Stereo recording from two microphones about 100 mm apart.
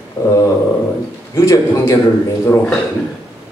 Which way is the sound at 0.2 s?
30° left (ahead or behind).